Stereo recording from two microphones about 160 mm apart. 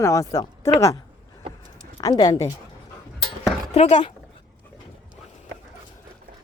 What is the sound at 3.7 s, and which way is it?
Speech, 40° left (ahead or behind).